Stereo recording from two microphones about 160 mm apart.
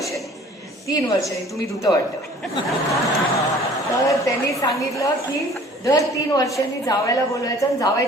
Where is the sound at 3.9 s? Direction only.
20° left (ahead or behind).